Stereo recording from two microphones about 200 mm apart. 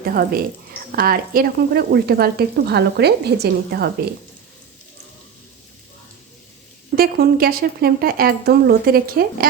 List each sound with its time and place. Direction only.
0.0 s a woman's voice: 45° right (ahead or behind)
6.9 s speech: 50° right (ahead or behind)